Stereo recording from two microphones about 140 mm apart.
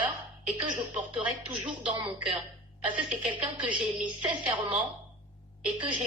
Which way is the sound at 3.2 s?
10° right (ahead or behind).